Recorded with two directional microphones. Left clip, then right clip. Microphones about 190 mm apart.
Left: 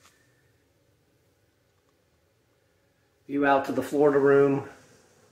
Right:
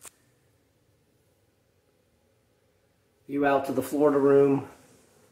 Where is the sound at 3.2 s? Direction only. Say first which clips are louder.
Left 1 dB; 10° right (ahead or behind).